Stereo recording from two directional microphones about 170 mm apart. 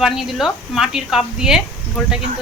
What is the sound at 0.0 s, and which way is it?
Speech, centre (ahead or behind).